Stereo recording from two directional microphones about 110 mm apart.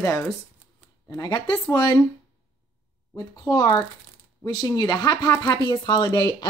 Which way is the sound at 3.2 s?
35° left (ahead or behind).